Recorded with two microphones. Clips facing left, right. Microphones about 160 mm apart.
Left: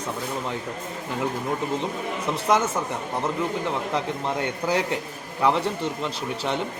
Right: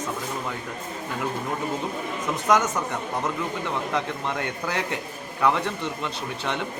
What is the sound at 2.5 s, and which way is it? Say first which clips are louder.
Speech: right 1 dB; 30° left (ahead or behind).